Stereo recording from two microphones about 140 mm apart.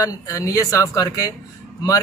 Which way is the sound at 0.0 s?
25° left (ahead or behind).